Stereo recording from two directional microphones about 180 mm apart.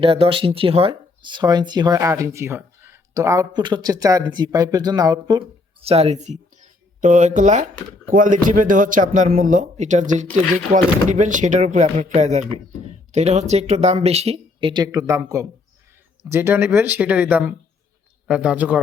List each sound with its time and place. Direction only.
0.0 s speech: 30° right (ahead or behind)
5.8 s speech: 35° right (ahead or behind); by 18.8 s 10° right (ahead or behind)